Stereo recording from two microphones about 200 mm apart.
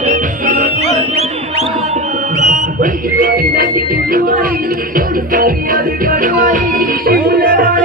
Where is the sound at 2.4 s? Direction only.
40° right (ahead or behind).